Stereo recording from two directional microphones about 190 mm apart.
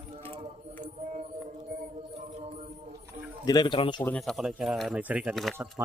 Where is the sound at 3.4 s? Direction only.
20° left (ahead or behind).